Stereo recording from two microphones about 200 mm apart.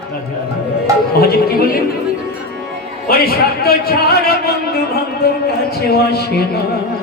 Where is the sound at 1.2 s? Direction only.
50° left (ahead or behind).